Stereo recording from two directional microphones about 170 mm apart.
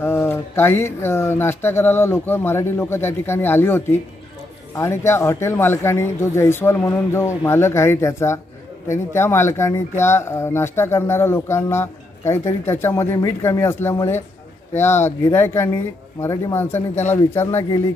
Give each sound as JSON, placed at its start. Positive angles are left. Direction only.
{"t": 0.0, "sound": "speech", "side_deg": 15}